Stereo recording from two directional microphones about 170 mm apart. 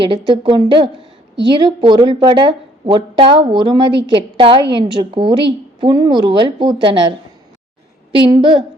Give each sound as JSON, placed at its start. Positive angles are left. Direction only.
{"t": 0.0, "sound": "a woman's voice", "side_deg": -30}
{"t": 8.1, "sound": "a woman's voice", "side_deg": -30}